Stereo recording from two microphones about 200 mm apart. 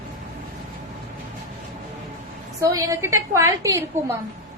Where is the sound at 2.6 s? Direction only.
15° right (ahead or behind).